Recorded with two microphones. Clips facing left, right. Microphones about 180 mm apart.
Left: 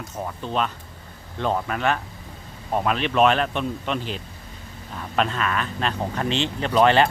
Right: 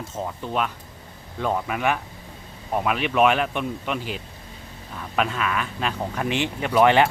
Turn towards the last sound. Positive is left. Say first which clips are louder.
# even
turn(degrees=-15)  # may be behind; listen again after turning